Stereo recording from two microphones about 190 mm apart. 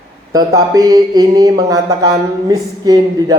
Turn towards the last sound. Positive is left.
turn(degrees=-20)  # may be behind; listen again after turning